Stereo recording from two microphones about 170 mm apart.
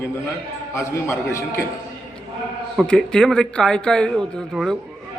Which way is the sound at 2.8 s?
5° left (ahead or behind).